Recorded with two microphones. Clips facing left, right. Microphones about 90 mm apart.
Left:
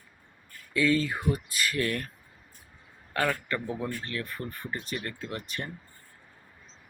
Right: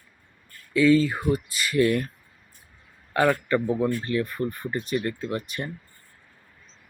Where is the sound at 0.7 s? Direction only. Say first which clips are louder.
Right 7 dB; centre (ahead or behind).